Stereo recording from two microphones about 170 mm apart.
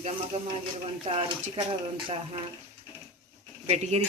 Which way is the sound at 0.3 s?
40° right (ahead or behind).